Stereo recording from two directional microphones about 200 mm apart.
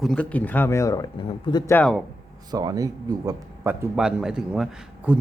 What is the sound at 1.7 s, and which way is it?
Speech, 5° left (ahead or behind).